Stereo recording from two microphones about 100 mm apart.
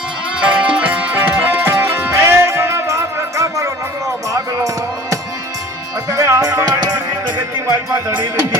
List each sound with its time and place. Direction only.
0.3 s music: 10° right (ahead or behind); by 3.7 s 30° right (ahead or behind)
6.1 s music: 30° right (ahead or behind)